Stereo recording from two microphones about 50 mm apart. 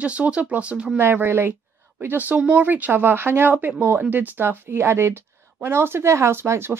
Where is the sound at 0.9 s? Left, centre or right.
Right.